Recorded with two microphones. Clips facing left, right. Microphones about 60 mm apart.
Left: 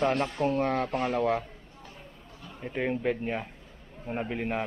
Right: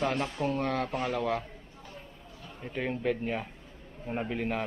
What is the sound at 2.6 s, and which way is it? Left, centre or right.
A man's voice, centre.